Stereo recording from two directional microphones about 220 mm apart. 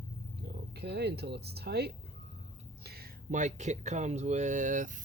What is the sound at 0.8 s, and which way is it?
Speech, 50° right (ahead or behind).